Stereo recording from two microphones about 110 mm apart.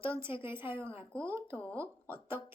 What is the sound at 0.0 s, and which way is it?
A woman's voice, 25° right (ahead or behind).